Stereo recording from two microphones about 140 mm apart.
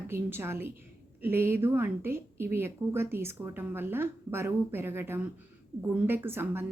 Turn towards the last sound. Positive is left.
turn(degrees=-15)  # may be behind; listen again after turning